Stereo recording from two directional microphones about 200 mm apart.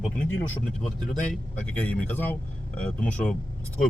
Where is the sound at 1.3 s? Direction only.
5° left (ahead or behind).